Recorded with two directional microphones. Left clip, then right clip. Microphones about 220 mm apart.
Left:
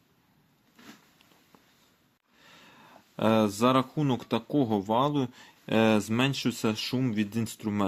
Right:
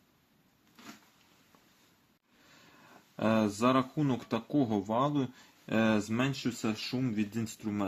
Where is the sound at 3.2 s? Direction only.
35° left (ahead or behind).